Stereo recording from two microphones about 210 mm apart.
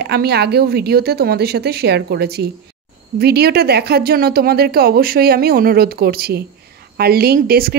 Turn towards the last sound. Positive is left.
turn(degrees=-45)  # may be behind; listen again after turning